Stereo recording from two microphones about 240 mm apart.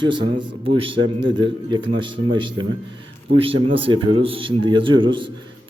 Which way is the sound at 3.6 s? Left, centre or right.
Right.